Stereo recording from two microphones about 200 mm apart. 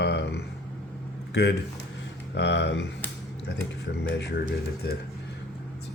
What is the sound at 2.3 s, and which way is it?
Speech, 60° left (ahead or behind).